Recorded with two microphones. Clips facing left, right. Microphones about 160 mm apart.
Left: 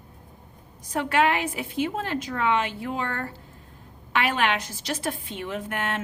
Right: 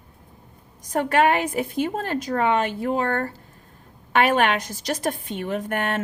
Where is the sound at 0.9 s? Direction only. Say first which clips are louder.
Right 3 dB; 45° right (ahead or behind).